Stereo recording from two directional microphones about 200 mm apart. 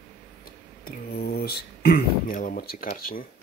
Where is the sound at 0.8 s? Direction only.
50° left (ahead or behind).